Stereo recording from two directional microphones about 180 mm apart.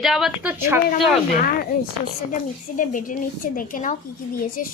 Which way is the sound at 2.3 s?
45° left (ahead or behind).